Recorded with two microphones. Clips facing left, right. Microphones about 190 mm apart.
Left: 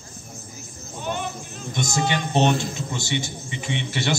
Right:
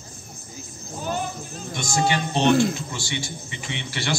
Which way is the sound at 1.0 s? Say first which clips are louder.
Right 1 dB; 35° right (ahead or behind).